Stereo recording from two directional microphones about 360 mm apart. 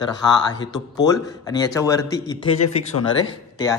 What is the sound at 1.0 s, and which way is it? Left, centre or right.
A man's voice, centre.